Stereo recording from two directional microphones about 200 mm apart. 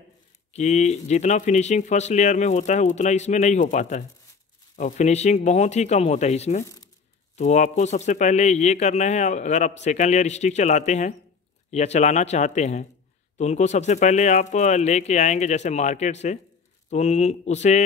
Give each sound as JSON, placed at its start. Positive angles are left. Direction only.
{"t": 0.5, "sound": "speech", "side_deg": 35}